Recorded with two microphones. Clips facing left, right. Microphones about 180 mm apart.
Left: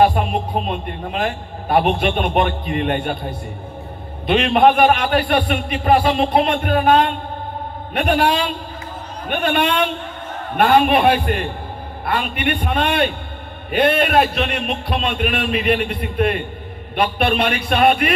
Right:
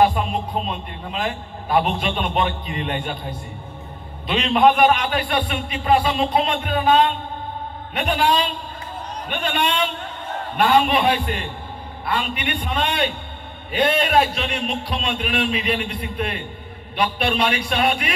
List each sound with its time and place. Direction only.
0.1 s a man's voice: 55° left (ahead or behind)
4.3 s a man's voice: 60° left (ahead or behind)